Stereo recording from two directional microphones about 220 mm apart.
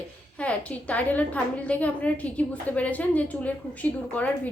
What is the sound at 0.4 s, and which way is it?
A woman's voice, 5° left (ahead or behind).